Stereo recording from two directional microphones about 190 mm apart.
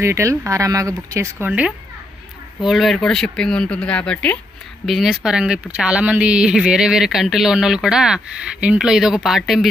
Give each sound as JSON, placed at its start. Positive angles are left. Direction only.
{"t": 0.0, "sound": "speech", "side_deg": -15}